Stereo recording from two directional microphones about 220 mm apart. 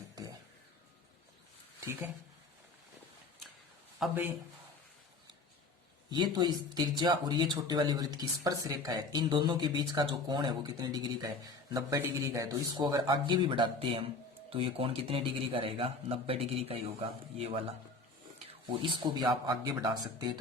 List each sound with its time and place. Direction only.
4.0 s speech: 10° right (ahead or behind)
6.1 s speech: 20° right (ahead or behind)
18.6 s speech: 20° right (ahead or behind)